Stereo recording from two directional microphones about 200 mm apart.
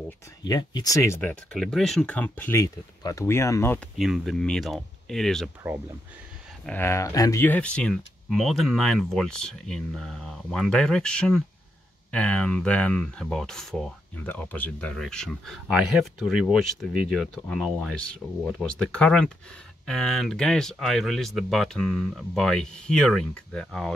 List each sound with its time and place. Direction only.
0.4 s speech: 20° left (ahead or behind)
1.5 s speech: centre (ahead or behind)
4.0 s speech: centre (ahead or behind)
6.6 s speech: 10° left (ahead or behind)